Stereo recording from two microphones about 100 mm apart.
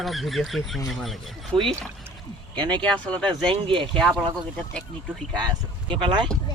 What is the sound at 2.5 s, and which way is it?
Speech, 50° right (ahead or behind).